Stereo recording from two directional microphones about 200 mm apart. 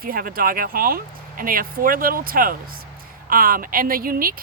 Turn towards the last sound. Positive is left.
turn(degrees=-45)  # may be behind; listen again after turning